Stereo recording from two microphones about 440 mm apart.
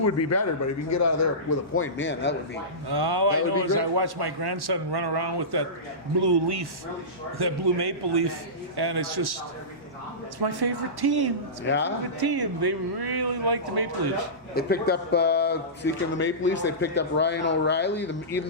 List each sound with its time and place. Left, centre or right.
0.0 s a man's voice: left
2.9 s speech: right
10.4 s speech: right
11.6 s speech: left
12.2 s speech: right
14.5 s speech: left